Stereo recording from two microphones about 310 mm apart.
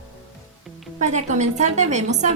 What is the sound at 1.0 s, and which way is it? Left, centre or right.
A woman's voice, right.